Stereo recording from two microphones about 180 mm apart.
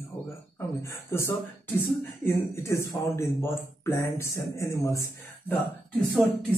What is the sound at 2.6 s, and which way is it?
Speech, 15° left (ahead or behind).